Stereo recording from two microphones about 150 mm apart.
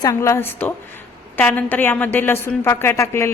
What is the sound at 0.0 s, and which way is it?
A woman's voice, 20° left (ahead or behind).